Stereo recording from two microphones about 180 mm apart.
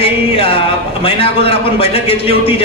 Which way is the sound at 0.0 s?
30° left (ahead or behind).